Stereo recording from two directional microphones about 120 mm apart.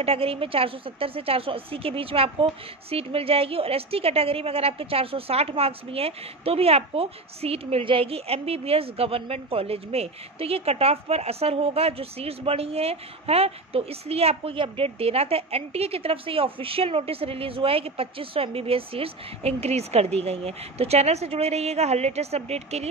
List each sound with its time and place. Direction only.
0.0 s a woman's voice: 55° right (ahead or behind)